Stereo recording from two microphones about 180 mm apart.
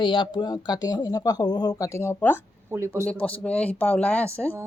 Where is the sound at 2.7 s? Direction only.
15° right (ahead or behind).